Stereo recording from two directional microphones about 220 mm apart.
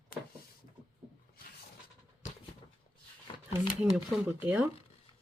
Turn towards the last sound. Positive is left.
turn(degrees=-10)  # may be behind; listen again after turning